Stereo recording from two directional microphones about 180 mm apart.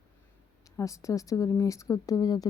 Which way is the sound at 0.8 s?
15° left (ahead or behind).